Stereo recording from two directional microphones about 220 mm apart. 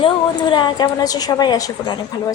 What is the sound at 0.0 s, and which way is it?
A woman's voice, 20° left (ahead or behind).